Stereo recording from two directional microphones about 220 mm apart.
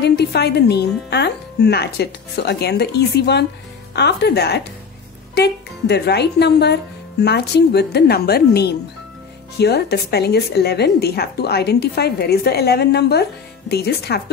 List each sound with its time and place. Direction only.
0.0 s a woman's voice: 50° left (ahead or behind)